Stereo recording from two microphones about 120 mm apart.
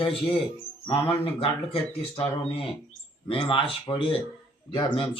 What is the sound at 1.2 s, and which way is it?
Speech, 50° left (ahead or behind).